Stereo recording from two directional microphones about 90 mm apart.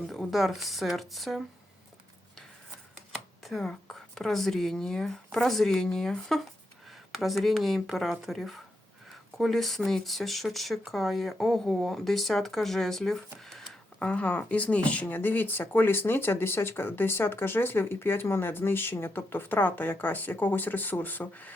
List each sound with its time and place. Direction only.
0.1 s speech: centre (ahead or behind)
3.4 s speech: 5° left (ahead or behind)
14.1 s speech: 15° left (ahead or behind)